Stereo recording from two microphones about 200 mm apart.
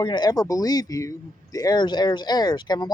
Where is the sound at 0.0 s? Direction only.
20° left (ahead or behind).